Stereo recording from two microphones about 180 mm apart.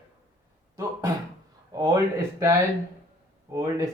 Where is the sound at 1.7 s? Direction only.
20° right (ahead or behind).